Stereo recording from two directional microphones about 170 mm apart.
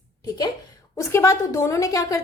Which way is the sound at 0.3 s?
25° left (ahead or behind).